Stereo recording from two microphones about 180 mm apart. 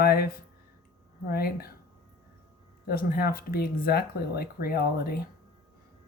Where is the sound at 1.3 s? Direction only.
60° left (ahead or behind).